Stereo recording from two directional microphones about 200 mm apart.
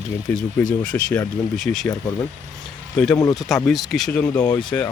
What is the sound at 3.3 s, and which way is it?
Speech, centre (ahead or behind).